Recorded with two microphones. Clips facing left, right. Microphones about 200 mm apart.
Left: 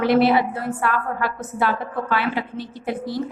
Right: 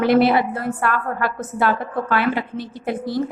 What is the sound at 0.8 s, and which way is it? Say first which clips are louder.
A woman's voice: right 1 dB; 50° right (ahead or behind).